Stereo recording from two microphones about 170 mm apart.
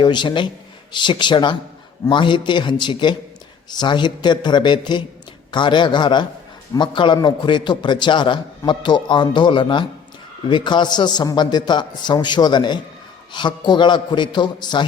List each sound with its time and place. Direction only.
0.0 s a man's voice: 25° left (ahead or behind)